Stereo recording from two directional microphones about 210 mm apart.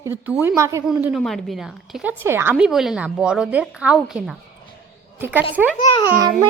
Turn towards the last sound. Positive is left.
turn(degrees=-15)  # may be behind; listen again after turning